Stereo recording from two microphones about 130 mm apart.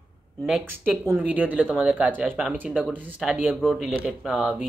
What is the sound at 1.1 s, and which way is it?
Speech, 15° right (ahead or behind).